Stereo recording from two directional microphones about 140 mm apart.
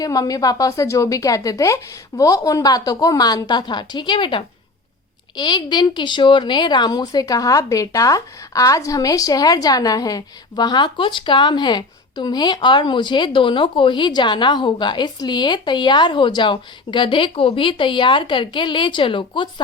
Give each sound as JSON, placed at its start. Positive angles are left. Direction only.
{"t": 0.0, "sound": "a woman's voice", "side_deg": 25}